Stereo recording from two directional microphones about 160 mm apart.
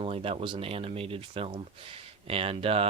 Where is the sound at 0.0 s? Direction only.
35° right (ahead or behind).